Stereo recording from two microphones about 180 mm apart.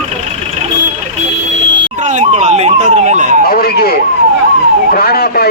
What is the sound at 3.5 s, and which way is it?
A man's voice, 55° left (ahead or behind).